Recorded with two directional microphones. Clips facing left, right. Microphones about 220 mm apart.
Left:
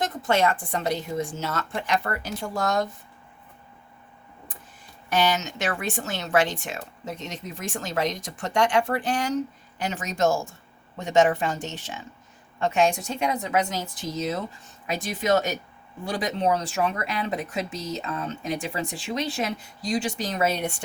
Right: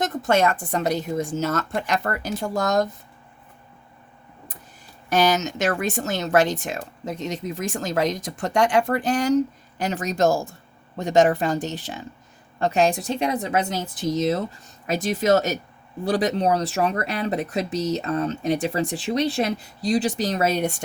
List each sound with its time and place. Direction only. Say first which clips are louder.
0.0 s speech: right 3 dB; 45° right (ahead or behind)
5.0 s speech: right 4 dB; 40° right (ahead or behind)